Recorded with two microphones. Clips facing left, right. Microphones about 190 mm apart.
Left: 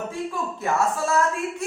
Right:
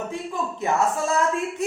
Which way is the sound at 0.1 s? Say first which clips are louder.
Even; 20° right (ahead or behind).